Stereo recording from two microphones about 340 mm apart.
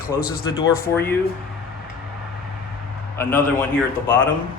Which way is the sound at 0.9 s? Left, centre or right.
Centre.